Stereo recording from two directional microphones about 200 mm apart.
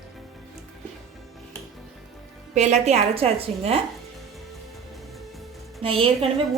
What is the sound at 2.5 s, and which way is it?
A woman's voice, 35° right (ahead or behind).